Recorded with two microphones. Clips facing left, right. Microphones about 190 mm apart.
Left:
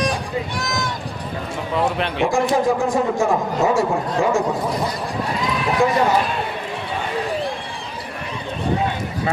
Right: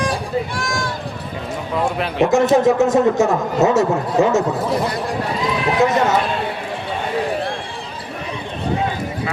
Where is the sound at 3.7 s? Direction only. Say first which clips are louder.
Right 4 dB; 20° right (ahead or behind).